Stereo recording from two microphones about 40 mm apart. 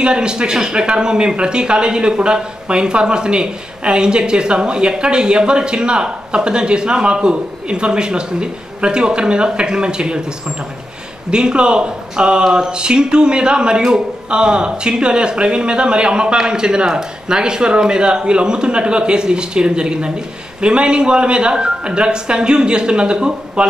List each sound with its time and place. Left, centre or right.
0.0 s speech: right
11.2 s speech: right